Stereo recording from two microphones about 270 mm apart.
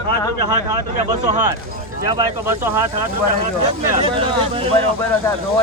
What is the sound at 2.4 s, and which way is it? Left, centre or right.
Speech, centre.